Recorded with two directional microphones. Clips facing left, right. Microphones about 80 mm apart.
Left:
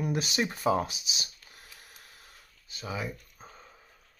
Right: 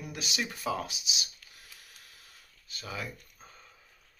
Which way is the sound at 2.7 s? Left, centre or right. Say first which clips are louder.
Left 4 dB; centre.